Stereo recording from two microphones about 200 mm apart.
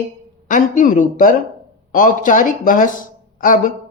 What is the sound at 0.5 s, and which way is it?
A man's voice, 40° left (ahead or behind).